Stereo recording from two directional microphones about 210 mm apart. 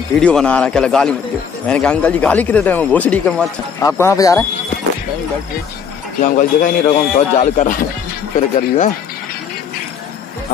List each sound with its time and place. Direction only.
0.2 s a man's voice: 5° left (ahead or behind)
3.8 s a man's voice: 15° left (ahead or behind)
6.2 s a man's voice: 40° left (ahead or behind)